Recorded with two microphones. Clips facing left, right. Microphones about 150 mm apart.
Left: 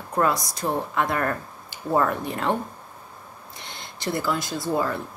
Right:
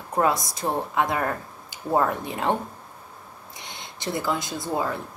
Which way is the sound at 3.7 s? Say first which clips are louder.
Left 2 dB; 20° right (ahead or behind).